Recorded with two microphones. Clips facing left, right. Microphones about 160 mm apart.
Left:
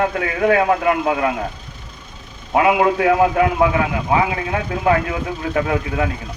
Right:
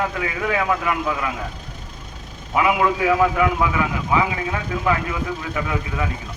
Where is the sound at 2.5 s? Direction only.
45° left (ahead or behind).